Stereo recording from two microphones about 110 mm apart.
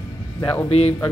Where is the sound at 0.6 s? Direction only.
75° left (ahead or behind).